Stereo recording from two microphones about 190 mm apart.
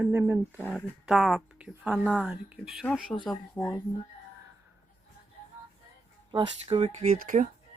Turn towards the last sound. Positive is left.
turn(degrees=-45)  # may be behind; listen again after turning